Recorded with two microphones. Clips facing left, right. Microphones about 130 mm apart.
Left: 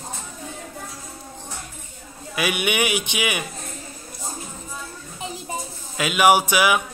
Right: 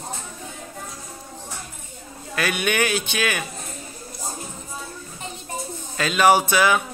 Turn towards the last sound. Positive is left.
turn(degrees=10)  # may be behind; listen again after turning